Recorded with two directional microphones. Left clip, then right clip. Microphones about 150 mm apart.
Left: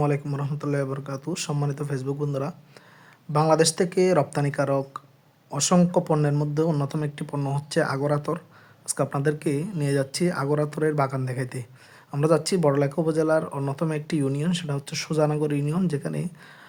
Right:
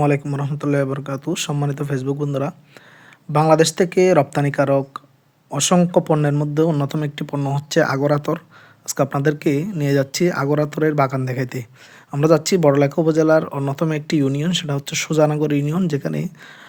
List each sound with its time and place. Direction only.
0.0 s speech: 25° right (ahead or behind)